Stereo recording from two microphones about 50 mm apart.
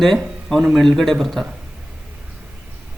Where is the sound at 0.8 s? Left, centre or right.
Centre.